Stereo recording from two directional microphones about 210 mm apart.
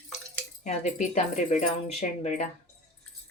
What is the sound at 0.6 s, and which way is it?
Speech, 35° left (ahead or behind).